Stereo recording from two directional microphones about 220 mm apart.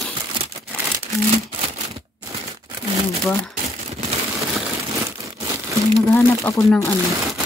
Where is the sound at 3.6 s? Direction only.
30° right (ahead or behind).